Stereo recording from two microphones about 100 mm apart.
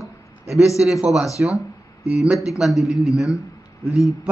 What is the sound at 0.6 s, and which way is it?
Speech, 5° right (ahead or behind).